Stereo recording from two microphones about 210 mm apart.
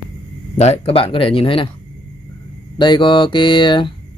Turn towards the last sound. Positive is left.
turn(degrees=20)  # may be behind; listen again after turning